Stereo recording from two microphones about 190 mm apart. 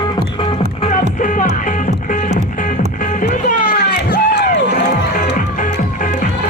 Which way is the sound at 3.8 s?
60° left (ahead or behind).